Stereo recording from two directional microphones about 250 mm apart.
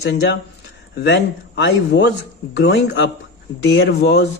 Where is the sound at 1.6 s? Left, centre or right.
Left.